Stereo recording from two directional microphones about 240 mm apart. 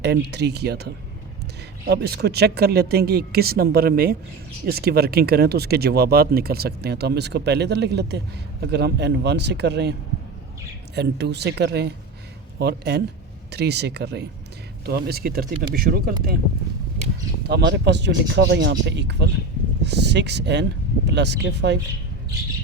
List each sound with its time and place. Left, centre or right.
0.0 s speech: right
1.9 s speech: right
10.9 s speech: right
17.5 s speech: right